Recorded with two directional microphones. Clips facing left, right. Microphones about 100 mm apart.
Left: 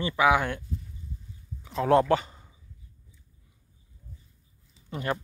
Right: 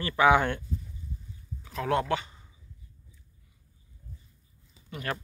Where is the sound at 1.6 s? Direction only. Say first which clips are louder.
Left 6 dB; 30° left (ahead or behind).